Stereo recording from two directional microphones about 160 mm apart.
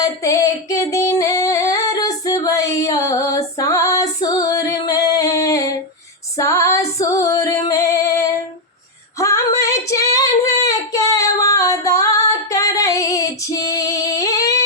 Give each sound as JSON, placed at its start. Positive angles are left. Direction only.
{"t": 0.0, "sound": "female singing", "side_deg": 20}